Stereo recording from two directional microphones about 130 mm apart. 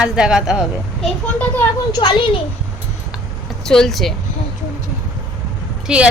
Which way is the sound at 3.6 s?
5° left (ahead or behind).